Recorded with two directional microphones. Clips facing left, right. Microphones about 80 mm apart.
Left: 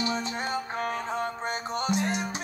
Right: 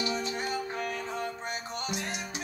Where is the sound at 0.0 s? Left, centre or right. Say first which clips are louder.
Left 2 dB; left.